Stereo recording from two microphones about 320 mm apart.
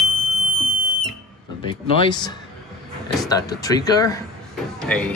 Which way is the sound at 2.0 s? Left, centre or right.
Centre.